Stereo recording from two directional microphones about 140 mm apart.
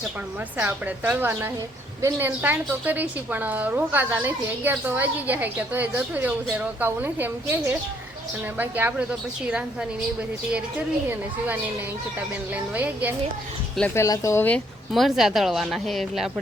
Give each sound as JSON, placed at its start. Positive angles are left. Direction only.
{"t": 0.5, "sound": "a woman's voice", "side_deg": -10}
{"t": 10.5, "sound": "a woman's voice", "side_deg": -10}
{"t": 12.5, "sound": "a woman's voice", "side_deg": -10}
{"t": 13.9, "sound": "speech", "side_deg": 20}
{"t": 14.9, "sound": "a woman's voice", "side_deg": 0}